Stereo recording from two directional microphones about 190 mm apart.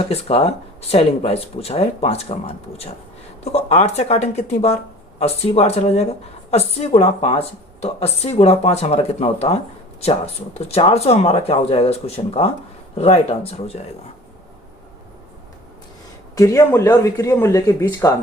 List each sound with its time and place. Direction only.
0.0 s speech: 30° left (ahead or behind)
16.3 s speech: 15° left (ahead or behind)